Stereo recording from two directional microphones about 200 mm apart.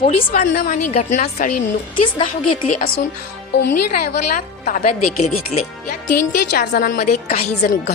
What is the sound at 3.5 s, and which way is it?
Speech, 60° left (ahead or behind).